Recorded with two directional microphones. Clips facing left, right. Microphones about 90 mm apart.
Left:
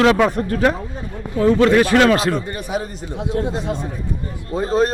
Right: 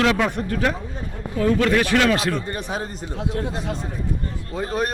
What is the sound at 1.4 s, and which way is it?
Speech, 25° left (ahead or behind).